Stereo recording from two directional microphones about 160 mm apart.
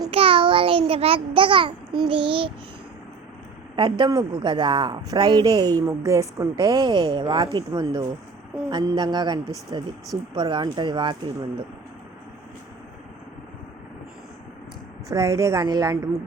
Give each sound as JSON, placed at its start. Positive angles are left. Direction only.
{"t": 0.1, "sound": "a child's voice", "side_deg": -35}
{"t": 2.0, "sound": "child singing", "side_deg": -30}
{"t": 3.8, "sound": "speech", "side_deg": -30}
{"t": 15.1, "sound": "speech", "side_deg": -20}